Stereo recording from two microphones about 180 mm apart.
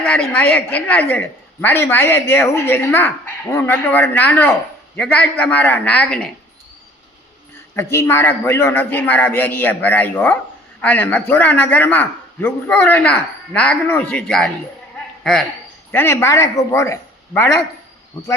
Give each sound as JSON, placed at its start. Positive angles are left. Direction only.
{"t": 0.0, "sound": "a man's voice", "side_deg": 5}
{"t": 7.8, "sound": "a man's voice", "side_deg": 15}
{"t": 15.9, "sound": "a man's voice", "side_deg": 10}